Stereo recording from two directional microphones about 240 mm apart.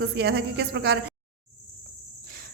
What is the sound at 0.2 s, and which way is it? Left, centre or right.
Speech, right.